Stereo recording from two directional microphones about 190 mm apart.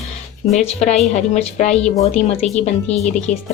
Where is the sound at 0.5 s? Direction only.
35° left (ahead or behind).